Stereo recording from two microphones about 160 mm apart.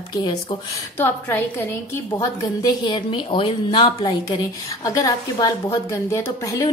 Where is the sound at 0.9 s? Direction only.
15° left (ahead or behind).